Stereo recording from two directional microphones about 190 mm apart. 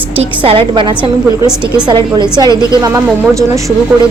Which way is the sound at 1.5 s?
5° right (ahead or behind).